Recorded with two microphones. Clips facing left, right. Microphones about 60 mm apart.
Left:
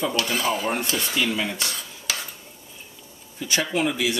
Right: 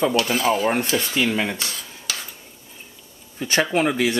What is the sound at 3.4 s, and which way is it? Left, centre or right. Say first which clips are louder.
Speech: right 4 dB; right.